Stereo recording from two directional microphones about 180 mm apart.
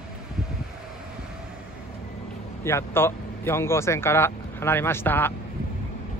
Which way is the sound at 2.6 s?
15° left (ahead or behind).